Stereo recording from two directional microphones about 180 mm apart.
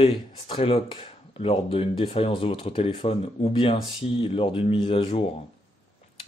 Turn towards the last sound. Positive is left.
turn(degrees=30)  # may be behind; listen again after turning